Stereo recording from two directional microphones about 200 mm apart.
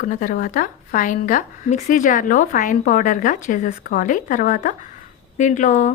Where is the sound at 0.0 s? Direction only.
40° left (ahead or behind).